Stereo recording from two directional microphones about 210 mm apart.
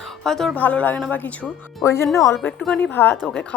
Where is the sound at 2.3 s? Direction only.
Centre (ahead or behind).